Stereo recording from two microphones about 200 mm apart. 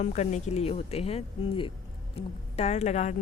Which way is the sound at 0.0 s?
35° left (ahead or behind).